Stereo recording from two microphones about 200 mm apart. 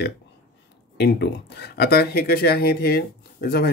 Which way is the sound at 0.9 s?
55° left (ahead or behind).